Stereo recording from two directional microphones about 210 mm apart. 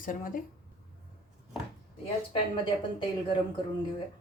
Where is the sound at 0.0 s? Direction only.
40° left (ahead or behind).